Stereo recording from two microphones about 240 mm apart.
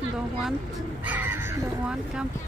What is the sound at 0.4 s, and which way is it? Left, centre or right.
Speech, centre.